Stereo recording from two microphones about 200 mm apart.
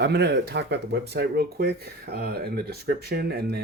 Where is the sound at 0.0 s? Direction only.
55° right (ahead or behind).